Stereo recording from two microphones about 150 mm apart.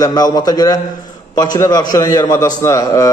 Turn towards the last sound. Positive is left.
turn(degrees=20)  # may be behind; listen again after turning